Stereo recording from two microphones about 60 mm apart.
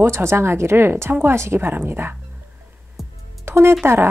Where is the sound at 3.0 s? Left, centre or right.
Centre.